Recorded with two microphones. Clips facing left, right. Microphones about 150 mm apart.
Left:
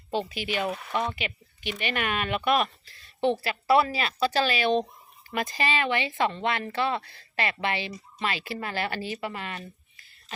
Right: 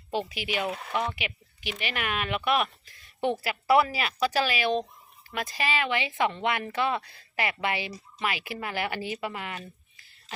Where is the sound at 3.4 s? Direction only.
15° right (ahead or behind).